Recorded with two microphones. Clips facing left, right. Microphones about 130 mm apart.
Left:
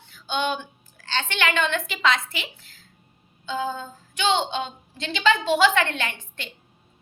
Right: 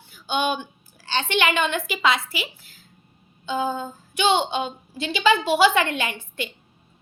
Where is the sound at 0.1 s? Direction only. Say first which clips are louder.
Right 2 dB; 10° right (ahead or behind).